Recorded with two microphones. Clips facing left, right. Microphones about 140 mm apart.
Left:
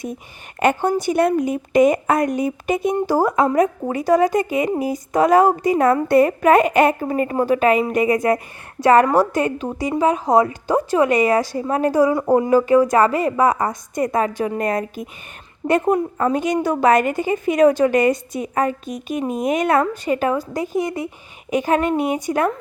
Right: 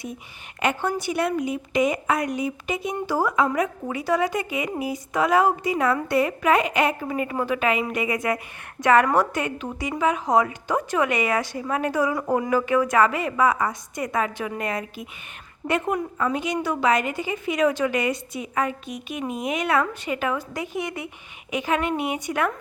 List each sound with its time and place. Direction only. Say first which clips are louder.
0.6 s a woman's voice: left 7 dB; 45° left (ahead or behind)